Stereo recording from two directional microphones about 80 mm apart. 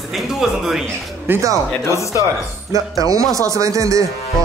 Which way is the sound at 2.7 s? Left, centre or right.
Right.